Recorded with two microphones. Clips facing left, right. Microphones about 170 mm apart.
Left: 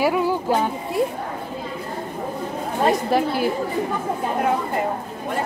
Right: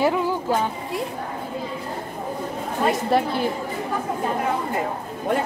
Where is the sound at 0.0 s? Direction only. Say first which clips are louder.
Left 1 dB; 10° left (ahead or behind).